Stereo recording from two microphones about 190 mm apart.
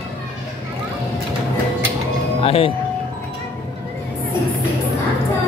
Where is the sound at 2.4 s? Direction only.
30° left (ahead or behind).